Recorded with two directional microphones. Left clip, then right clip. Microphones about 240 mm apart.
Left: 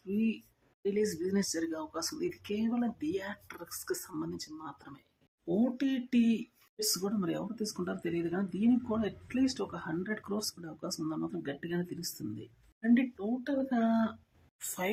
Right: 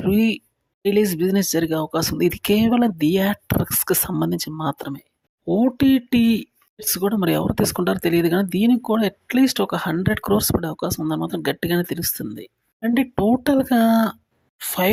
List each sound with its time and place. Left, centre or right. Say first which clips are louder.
0.8 s speech: right 13 dB; right